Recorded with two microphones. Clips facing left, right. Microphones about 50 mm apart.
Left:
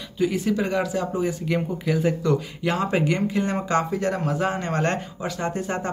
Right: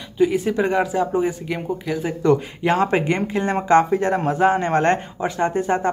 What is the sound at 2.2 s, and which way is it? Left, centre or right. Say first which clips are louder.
Speech: right 5 dB; right.